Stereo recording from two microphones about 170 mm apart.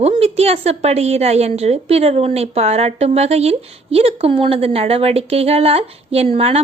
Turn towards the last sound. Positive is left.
turn(degrees=-40)  # may be behind; listen again after turning